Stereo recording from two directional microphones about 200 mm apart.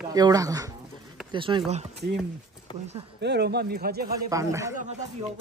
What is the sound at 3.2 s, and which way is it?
Speech, 55° right (ahead or behind).